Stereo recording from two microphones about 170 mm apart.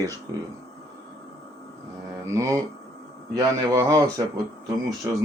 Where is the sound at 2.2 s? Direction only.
20° right (ahead or behind).